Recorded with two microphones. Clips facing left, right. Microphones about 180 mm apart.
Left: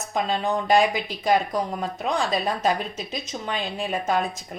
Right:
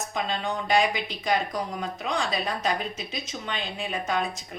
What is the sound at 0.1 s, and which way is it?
A woman's voice, 40° left (ahead or behind).